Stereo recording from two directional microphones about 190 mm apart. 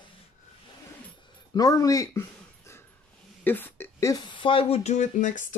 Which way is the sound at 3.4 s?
10° left (ahead or behind).